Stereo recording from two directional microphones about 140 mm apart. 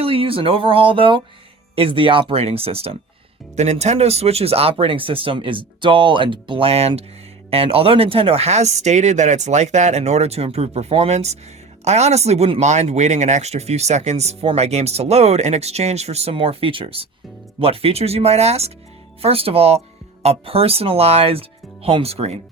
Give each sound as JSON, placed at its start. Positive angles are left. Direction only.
{"t": 0.0, "sound": "speech", "side_deg": -40}